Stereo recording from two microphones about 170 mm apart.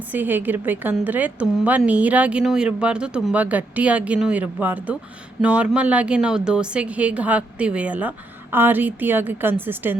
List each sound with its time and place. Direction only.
0.1 s a woman's voice: 10° right (ahead or behind)